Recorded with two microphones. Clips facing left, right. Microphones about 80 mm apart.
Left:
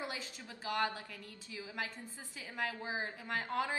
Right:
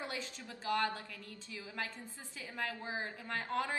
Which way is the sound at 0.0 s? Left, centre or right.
Centre.